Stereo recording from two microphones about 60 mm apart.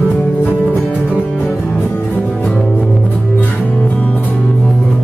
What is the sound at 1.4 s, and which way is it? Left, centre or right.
Music, centre.